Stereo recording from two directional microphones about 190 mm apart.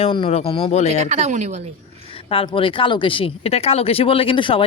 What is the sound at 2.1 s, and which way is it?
Speech, 30° left (ahead or behind).